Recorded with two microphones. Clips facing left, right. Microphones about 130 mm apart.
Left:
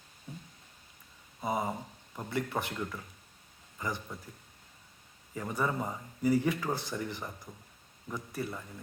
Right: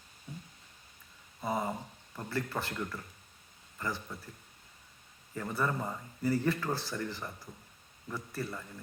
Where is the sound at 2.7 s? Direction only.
10° left (ahead or behind).